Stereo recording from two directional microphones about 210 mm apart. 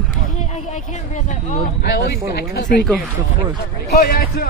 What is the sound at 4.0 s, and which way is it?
Speech, 45° left (ahead or behind).